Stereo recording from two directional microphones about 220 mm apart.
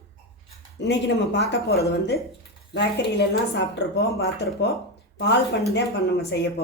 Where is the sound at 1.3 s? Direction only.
50° left (ahead or behind).